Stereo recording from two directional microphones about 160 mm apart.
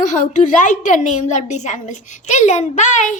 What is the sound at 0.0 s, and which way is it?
A child's voice, 50° left (ahead or behind).